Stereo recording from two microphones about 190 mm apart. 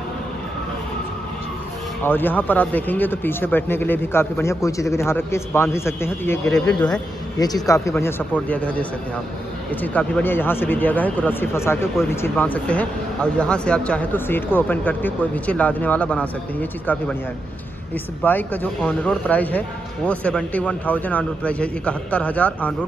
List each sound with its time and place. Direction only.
2.0 s speech: 10° left (ahead or behind)
7.3 s speech: 20° left (ahead or behind)
18.2 s speech: 10° left (ahead or behind)